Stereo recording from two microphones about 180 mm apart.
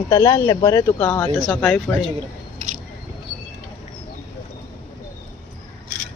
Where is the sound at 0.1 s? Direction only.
20° left (ahead or behind).